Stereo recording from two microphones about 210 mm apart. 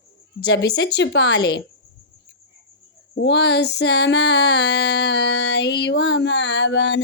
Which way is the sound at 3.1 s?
55° left (ahead or behind).